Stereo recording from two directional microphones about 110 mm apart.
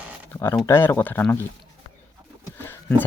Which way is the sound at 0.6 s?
20° left (ahead or behind).